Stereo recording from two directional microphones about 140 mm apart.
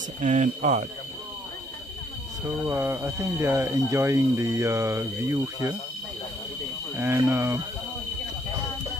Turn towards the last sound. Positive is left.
turn(degrees=-20)  # may be behind; listen again after turning